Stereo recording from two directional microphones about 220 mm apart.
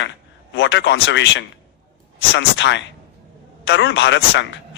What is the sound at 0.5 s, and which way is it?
Speech, 55° left (ahead or behind).